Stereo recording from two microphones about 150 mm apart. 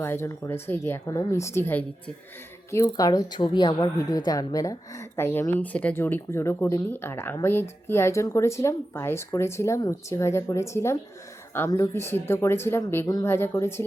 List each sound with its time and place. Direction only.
0.0 s a woman's voice: 15° left (ahead or behind)